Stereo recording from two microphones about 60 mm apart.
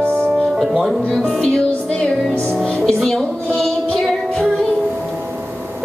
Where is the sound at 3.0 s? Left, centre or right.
Centre.